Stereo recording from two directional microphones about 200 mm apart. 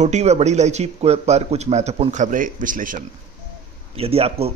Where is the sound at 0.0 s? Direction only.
35° right (ahead or behind).